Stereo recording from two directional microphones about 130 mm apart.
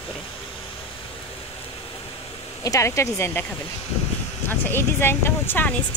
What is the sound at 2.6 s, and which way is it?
Speech, 25° left (ahead or behind).